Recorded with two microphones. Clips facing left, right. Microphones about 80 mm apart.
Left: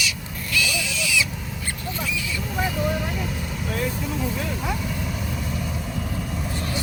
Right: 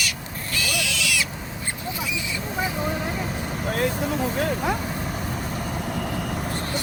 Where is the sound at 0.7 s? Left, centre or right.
Right.